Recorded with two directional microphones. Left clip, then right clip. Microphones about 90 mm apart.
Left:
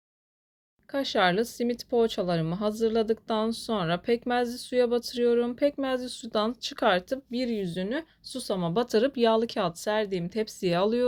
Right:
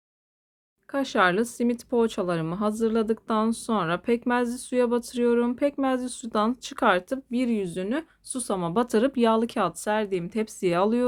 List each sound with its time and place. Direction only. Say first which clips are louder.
0.9 s speech: right 2 dB; 40° right (ahead or behind)